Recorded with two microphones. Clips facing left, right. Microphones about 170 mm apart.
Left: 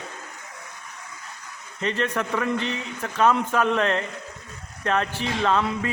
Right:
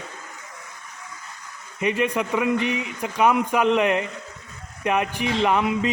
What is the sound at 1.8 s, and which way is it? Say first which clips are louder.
A man's voice: right 3 dB; 10° right (ahead or behind).